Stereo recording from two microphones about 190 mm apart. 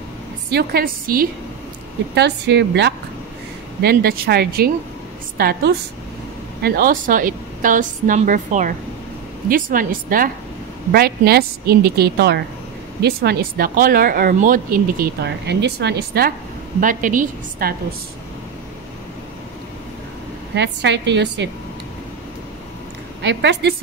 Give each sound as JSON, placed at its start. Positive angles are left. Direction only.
{"t": 0.5, "sound": "speech", "side_deg": -55}
{"t": 2.1, "sound": "a woman's voice", "side_deg": -60}
{"t": 16.8, "sound": "speech", "side_deg": -45}
{"t": 20.5, "sound": "a woman's voice", "side_deg": -65}
{"t": 23.2, "sound": "a woman's voice", "side_deg": -65}